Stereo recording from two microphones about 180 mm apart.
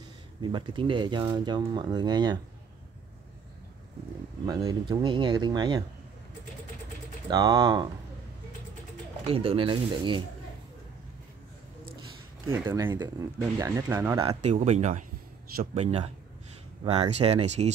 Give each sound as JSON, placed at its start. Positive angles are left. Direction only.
{"t": 0.4, "sound": "speech", "side_deg": -25}
{"t": 4.5, "sound": "speech", "side_deg": -20}
{"t": 7.2, "sound": "speech", "side_deg": -25}
{"t": 9.3, "sound": "speech", "side_deg": -30}
{"t": 12.6, "sound": "speech", "side_deg": -20}
{"t": 14.2, "sound": "speech", "side_deg": -40}
{"t": 15.7, "sound": "speech", "side_deg": -30}